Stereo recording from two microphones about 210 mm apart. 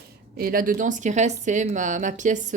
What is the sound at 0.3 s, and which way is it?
A woman's voice, 45° right (ahead or behind).